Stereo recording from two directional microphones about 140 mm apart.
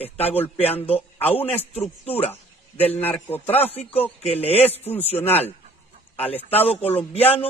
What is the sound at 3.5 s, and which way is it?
A man's voice, 45° left (ahead or behind).